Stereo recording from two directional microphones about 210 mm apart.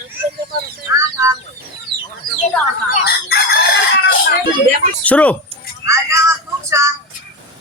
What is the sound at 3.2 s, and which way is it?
Chicken, 45° left (ahead or behind).